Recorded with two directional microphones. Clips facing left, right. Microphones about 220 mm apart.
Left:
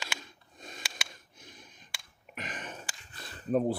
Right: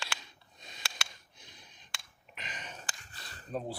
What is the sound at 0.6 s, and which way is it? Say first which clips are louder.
Sniff: left 8 dB; 50° left (ahead or behind).